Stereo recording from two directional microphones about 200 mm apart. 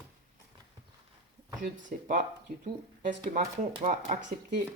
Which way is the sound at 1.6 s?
40° right (ahead or behind).